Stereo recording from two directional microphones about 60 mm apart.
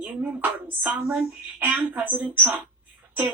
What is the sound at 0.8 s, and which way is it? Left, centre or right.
Speech, right.